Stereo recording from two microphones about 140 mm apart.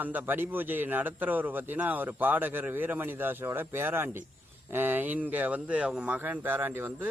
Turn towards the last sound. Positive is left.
turn(degrees=-15)  # may be behind; listen again after turning